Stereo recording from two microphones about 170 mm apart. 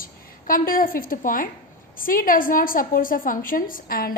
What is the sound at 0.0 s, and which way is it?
A woman's voice, 55° left (ahead or behind).